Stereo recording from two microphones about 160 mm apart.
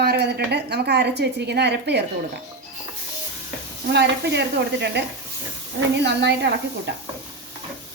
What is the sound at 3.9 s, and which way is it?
A woman's voice, 90° right.